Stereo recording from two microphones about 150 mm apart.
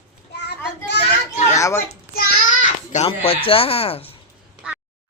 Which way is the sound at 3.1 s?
40° left (ahead or behind).